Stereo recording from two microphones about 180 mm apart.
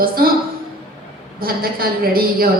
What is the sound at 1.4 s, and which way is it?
A woman's voice, 55° right (ahead or behind).